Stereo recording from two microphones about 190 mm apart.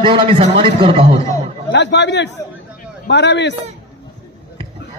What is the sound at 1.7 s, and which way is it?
Speech, 65° left (ahead or behind).